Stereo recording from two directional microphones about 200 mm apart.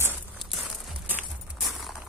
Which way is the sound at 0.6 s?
5° right (ahead or behind).